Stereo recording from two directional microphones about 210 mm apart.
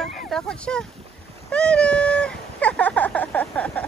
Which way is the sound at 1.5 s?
5° left (ahead or behind).